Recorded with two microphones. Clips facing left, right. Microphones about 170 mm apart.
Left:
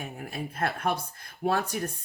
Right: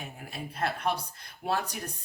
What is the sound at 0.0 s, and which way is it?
Speech, 50° left (ahead or behind).